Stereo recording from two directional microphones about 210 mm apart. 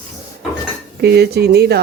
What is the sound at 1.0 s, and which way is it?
Speech, 50° right (ahead or behind).